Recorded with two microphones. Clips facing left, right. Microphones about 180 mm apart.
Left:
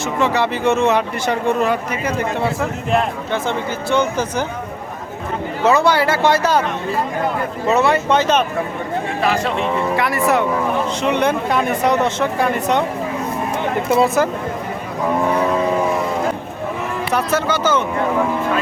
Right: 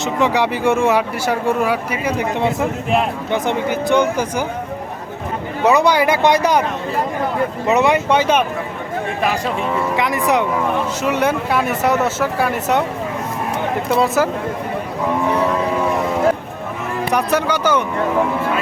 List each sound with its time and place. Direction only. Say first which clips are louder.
0.0 s speech: right 1 dB; 15° right (ahead or behind)
5.6 s speech: right 1 dB; 15° right (ahead or behind)
7.7 s speech: even; 15° right (ahead or behind)
10.0 s speech: even; 15° right (ahead or behind)
13.9 s speech: left 1 dB; centre (ahead or behind)
17.1 s speech: right 1 dB; 15° right (ahead or behind)